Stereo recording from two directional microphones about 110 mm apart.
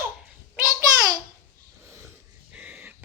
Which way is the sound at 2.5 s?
10° right (ahead or behind).